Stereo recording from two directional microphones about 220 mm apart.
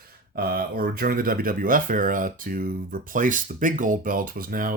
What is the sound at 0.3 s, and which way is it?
Speech, 45° right (ahead or behind).